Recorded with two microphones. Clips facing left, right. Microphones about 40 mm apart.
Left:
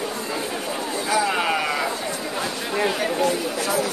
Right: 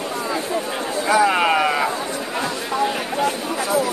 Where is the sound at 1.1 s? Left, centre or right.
Right.